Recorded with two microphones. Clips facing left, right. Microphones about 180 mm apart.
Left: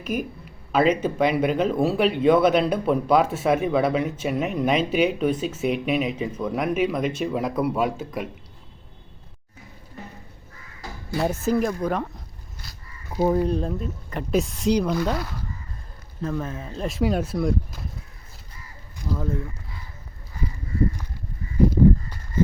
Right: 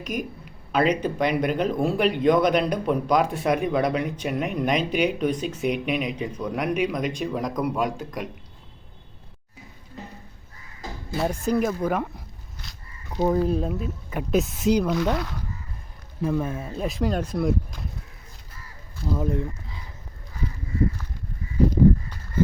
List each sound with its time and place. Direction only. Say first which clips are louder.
0.0 s speech: left 2 dB; 5° left (ahead or behind)
11.2 s speech: left 1 dB; 5° left (ahead or behind)
16.2 s speech: right 3 dB; 10° right (ahead or behind)
19.1 s speech: right 2 dB; 15° right (ahead or behind)